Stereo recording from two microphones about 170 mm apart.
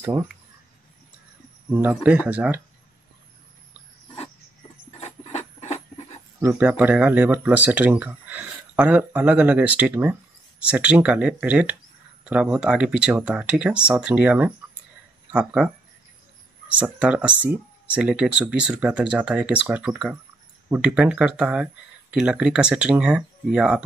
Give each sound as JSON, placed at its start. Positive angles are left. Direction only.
{"t": 0.0, "sound": "speech", "side_deg": -15}
{"t": 1.7, "sound": "speech", "side_deg": -15}
{"t": 5.0, "sound": "a sound", "side_deg": 40}
{"t": 6.4, "sound": "speech", "side_deg": -10}
{"t": 16.7, "sound": "speech", "side_deg": -5}